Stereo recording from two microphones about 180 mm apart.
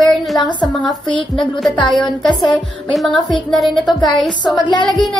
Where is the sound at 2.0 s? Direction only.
Centre (ahead or behind).